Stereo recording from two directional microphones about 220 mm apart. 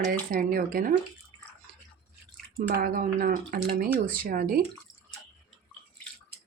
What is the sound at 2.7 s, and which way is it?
Speech, 40° right (ahead or behind).